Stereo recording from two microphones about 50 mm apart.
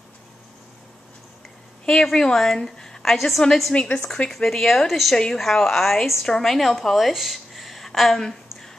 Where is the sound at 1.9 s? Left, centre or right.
Centre.